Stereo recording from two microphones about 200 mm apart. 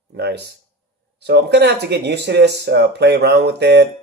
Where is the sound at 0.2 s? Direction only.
55° right (ahead or behind).